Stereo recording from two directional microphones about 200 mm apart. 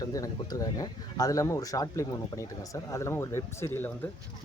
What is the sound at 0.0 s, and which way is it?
Speech, 15° left (ahead or behind).